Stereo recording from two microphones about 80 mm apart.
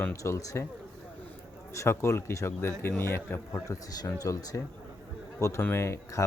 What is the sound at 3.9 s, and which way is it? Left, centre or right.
Speech, left.